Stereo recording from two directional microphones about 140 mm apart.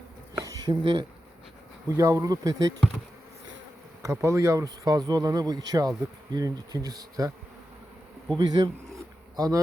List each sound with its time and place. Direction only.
0.3 s a sound: 25° right (ahead or behind)
2.0 s speech: 25° right (ahead or behind)
4.0 s speech: 20° right (ahead or behind)
8.4 s speech: 30° right (ahead or behind)